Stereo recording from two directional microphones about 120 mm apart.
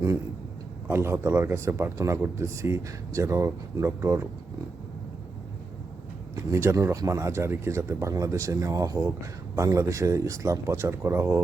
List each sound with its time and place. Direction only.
0.9 s speech: 20° right (ahead or behind)
6.3 s speech: 25° right (ahead or behind)